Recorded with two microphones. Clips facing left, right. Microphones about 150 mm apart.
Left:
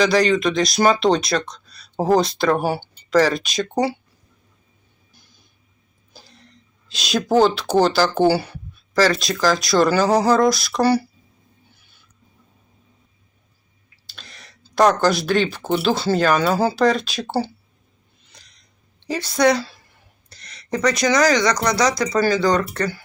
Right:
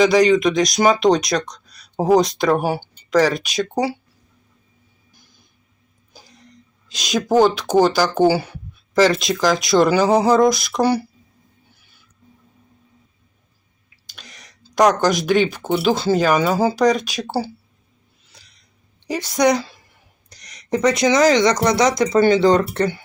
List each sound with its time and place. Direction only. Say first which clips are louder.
0.0 s speech: right 3 dB; 20° right (ahead or behind)
6.9 s speech: right 1 dB; 15° right (ahead or behind)
14.1 s speech: even; 15° right (ahead or behind)
18.3 s a sound: even; 5° right (ahead or behind)
19.0 s a woman's voice: even; 15° right (ahead or behind)